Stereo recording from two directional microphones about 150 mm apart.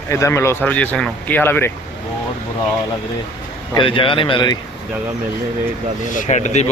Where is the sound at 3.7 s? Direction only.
35° left (ahead or behind).